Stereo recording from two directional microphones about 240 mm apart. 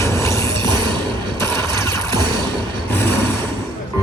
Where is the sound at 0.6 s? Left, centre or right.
Centre.